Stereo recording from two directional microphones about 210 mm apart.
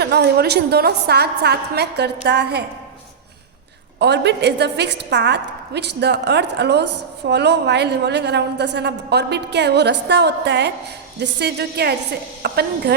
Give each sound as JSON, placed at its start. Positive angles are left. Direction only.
{"t": 0.0, "sound": "a woman's voice", "side_deg": -50}
{"t": 4.0, "sound": "a woman's voice", "side_deg": -55}